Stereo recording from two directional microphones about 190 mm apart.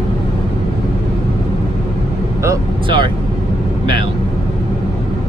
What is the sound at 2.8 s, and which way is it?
Speech, 25° right (ahead or behind).